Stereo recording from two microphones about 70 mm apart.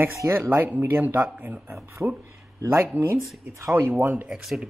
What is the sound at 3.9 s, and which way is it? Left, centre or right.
Speech, right.